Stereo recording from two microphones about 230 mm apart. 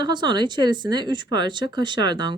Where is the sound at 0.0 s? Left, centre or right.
Centre.